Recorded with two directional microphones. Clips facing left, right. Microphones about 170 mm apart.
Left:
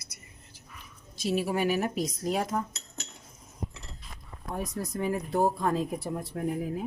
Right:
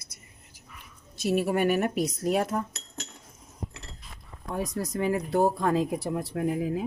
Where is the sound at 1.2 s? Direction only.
60° right (ahead or behind).